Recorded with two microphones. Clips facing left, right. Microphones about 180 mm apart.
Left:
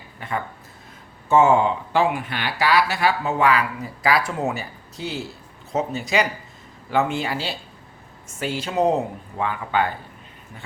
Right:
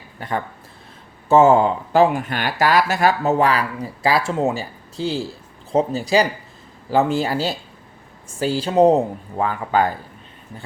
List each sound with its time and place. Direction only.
0.2 s speech: 35° right (ahead or behind)